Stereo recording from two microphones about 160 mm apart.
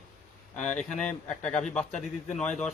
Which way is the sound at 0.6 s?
50° left (ahead or behind).